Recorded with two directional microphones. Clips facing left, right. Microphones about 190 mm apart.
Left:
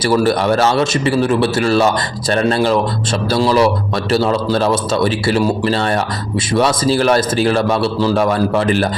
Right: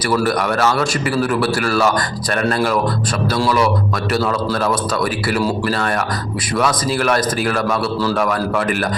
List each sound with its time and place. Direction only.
0.0 s a man's voice: 25° left (ahead or behind)